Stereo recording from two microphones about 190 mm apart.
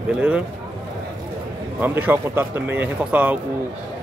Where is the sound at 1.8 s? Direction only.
10° right (ahead or behind).